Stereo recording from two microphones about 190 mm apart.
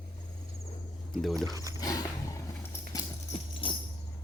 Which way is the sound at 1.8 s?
20° left (ahead or behind).